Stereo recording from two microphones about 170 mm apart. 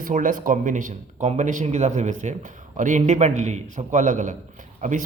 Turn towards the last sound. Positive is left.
turn(degrees=-45)  # may be behind; listen again after turning